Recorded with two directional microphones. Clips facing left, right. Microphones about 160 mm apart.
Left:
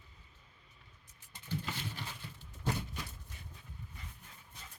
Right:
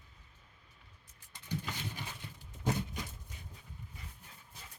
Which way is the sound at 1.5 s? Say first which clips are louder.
Even; 15° right (ahead or behind).